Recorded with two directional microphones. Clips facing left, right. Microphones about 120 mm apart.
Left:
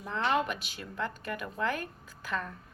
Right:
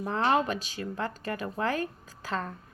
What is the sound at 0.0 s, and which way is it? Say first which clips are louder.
A woman's voice: right 4 dB; 40° right (ahead or behind).